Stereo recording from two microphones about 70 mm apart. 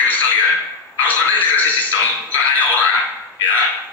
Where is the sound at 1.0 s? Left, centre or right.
Left.